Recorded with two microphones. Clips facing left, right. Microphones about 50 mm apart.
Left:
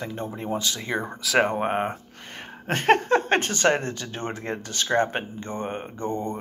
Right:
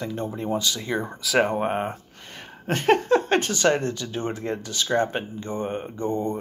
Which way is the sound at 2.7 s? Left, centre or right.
Left.